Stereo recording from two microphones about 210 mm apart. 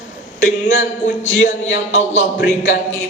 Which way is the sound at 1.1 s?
60° left (ahead or behind).